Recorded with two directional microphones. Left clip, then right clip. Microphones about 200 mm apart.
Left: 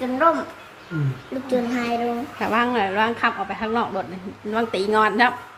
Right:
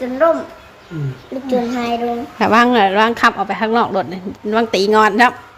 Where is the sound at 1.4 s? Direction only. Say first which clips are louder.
Right 5 dB; 25° right (ahead or behind).